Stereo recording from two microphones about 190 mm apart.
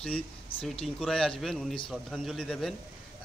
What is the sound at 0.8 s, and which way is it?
A man's voice, centre (ahead or behind).